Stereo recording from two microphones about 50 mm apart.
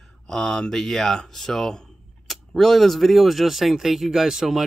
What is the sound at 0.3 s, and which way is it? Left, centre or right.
Speech, centre.